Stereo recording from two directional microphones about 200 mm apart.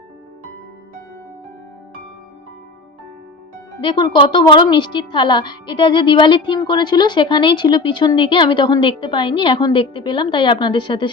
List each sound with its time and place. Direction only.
3.8 s a woman's voice: 25° left (ahead or behind)